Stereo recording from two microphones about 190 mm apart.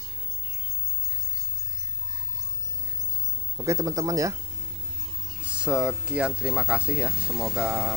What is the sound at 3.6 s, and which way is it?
Speech, 20° right (ahead or behind).